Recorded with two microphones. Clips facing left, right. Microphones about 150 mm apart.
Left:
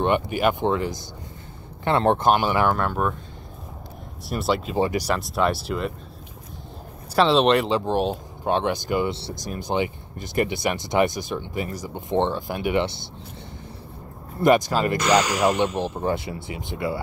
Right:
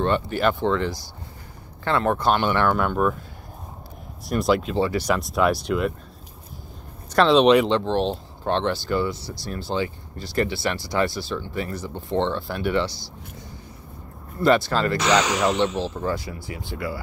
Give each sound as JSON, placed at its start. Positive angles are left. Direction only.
{"t": 0.0, "sound": "speech", "side_deg": 15}
{"t": 2.3, "sound": "speech", "side_deg": 10}
{"t": 4.3, "sound": "speech", "side_deg": 0}
{"t": 4.7, "sound": "speech", "side_deg": 15}
{"t": 5.0, "sound": "speech", "side_deg": 0}
{"t": 7.2, "sound": "speech", "side_deg": 0}
{"t": 7.8, "sound": "speech", "side_deg": 10}
{"t": 14.4, "sound": "speech", "side_deg": 15}
{"t": 16.0, "sound": "speech", "side_deg": 25}